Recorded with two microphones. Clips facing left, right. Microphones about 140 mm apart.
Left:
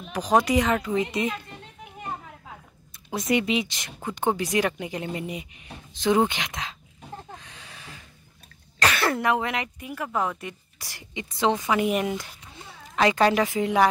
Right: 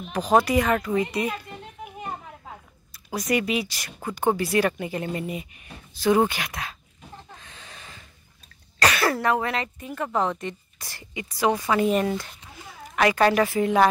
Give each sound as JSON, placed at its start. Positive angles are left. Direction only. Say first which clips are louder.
{"t": 0.1, "sound": "a woman's voice", "louder": "right 1 dB", "side_deg": 15}
{"t": 3.1, "sound": "a woman's voice", "louder": "left 1 dB", "side_deg": 25}
{"t": 7.3, "sound": "a sound", "louder": "left 1 dB", "side_deg": 15}
{"t": 8.8, "sound": "throat clearing", "louder": "right 2 dB", "side_deg": -10}
{"t": 9.1, "sound": "a woman's voice", "louder": "right 1 dB", "side_deg": 20}